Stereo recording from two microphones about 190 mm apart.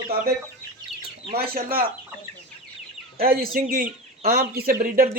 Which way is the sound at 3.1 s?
50° right (ahead or behind).